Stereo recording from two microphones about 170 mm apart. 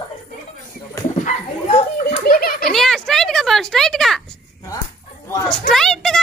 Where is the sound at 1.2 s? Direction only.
40° left (ahead or behind).